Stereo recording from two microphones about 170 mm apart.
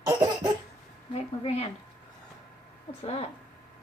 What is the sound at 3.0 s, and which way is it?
Speech, 35° left (ahead or behind).